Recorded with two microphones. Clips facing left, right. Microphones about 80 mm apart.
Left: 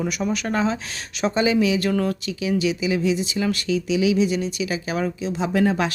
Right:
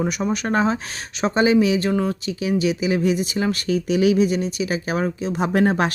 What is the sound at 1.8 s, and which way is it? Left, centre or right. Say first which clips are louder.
Speech: right 1 dB; right.